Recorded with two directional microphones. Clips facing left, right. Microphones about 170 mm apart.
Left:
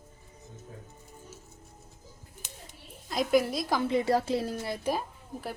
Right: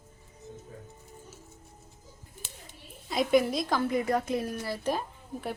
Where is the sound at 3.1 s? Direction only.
Centre (ahead or behind).